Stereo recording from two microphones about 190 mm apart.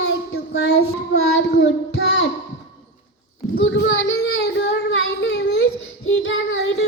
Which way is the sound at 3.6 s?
80° left.